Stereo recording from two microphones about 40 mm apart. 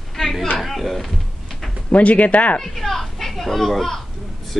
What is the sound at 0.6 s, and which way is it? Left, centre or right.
Speech, centre.